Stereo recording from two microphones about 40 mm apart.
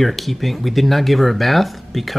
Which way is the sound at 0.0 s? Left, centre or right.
Centre.